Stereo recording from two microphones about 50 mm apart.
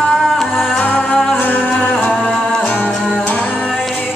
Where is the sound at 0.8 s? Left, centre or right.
Left.